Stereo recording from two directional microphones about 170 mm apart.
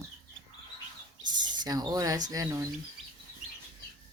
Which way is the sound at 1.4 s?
25° right (ahead or behind).